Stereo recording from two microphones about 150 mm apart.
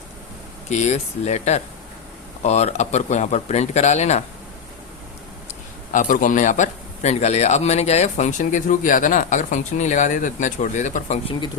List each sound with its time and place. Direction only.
0.7 s speech: 50° left (ahead or behind)
5.9 s a man's voice: 60° left (ahead or behind)
11.3 s speech: 30° left (ahead or behind)